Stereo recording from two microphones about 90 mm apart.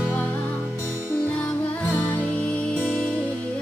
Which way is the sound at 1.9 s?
25° left (ahead or behind).